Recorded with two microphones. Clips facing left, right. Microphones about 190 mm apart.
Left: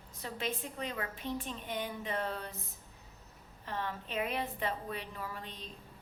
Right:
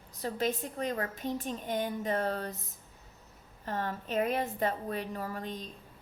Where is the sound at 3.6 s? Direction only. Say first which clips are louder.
Right 4 dB; 45° right (ahead or behind).